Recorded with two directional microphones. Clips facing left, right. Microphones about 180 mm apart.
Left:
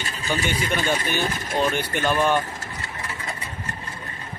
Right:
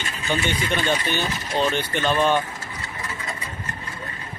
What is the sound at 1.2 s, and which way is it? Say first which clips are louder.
Speech: left 1 dB; 50° left (ahead or behind).